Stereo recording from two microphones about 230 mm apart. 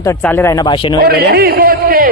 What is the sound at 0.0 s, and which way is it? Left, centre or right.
Speech, centre.